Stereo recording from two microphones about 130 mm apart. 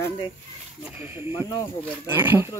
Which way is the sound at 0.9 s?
15° right (ahead or behind).